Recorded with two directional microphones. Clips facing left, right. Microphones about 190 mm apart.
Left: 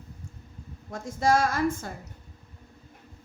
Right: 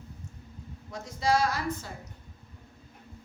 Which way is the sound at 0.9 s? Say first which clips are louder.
Left 3 dB; 50° left (ahead or behind).